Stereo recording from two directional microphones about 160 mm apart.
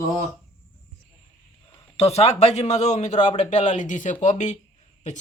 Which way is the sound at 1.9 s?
40° left (ahead or behind).